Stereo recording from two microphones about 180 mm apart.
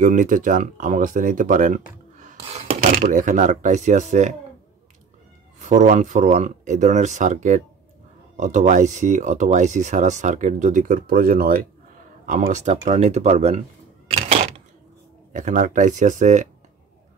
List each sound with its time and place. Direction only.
0.0 s speech: 45° right (ahead or behind)
5.6 s speech: 40° right (ahead or behind)
12.3 s speech: 40° right (ahead or behind)
15.3 s speech: 45° right (ahead or behind)